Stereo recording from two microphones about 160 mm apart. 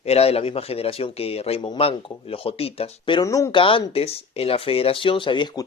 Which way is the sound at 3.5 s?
35° left (ahead or behind).